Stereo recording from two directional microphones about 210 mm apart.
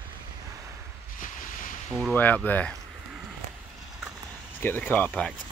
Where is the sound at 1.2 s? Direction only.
40° left (ahead or behind).